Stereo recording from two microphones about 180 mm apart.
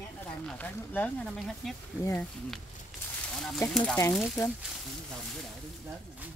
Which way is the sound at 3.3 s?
5° left (ahead or behind).